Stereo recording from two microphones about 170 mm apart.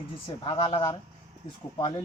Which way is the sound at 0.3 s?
30° left (ahead or behind).